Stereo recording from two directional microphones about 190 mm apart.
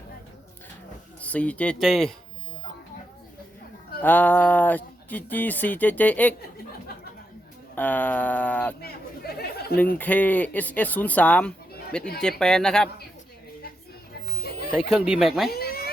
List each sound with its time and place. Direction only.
1.2 s speech: 5° left (ahead or behind)
4.0 s speech: 10° left (ahead or behind)
7.8 s speech: 10° left (ahead or behind)
8.8 s chatter: 55° left (ahead or behind)
10.0 s speech: 10° left (ahead or behind)
14.8 s speech: centre (ahead or behind)
15.4 s a sound: 55° left (ahead or behind)